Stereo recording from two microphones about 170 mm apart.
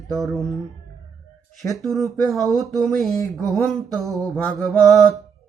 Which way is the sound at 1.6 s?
Centre (ahead or behind).